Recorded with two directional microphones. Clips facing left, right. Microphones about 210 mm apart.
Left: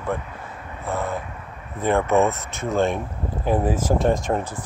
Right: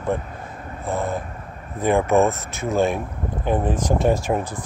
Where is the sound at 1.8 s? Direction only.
10° right (ahead or behind).